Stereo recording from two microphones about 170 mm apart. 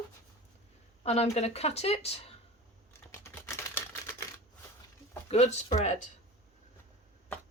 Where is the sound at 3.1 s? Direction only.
15° left (ahead or behind).